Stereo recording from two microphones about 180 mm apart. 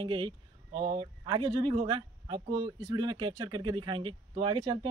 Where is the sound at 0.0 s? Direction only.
25° right (ahead or behind).